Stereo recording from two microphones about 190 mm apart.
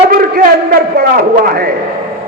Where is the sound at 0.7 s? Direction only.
50° right (ahead or behind).